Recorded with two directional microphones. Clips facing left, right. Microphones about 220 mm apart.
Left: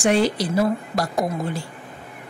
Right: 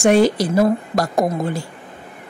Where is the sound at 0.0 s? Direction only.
45° right (ahead or behind).